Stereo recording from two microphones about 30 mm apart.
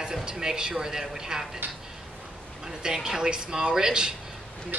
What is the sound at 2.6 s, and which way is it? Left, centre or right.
A man's voice, right.